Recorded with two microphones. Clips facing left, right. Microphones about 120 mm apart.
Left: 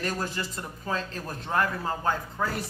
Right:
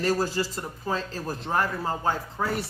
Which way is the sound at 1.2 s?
5° right (ahead or behind).